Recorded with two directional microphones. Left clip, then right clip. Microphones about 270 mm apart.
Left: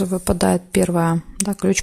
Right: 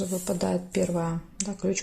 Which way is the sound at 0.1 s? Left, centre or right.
Left.